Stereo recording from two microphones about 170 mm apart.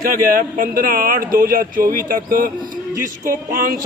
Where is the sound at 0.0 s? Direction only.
60° right (ahead or behind).